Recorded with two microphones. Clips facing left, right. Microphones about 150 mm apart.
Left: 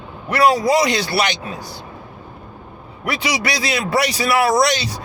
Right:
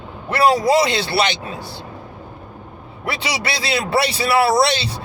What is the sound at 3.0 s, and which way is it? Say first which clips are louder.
A man's voice: left 2 dB; 30° right (ahead or behind).